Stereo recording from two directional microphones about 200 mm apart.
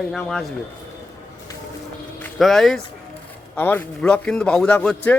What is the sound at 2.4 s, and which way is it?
A man's voice, centre (ahead or behind).